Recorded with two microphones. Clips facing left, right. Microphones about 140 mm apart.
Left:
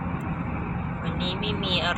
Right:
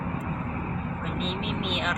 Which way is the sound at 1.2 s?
20° left (ahead or behind).